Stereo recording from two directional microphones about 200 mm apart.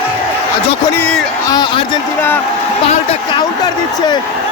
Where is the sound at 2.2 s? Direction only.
10° left (ahead or behind).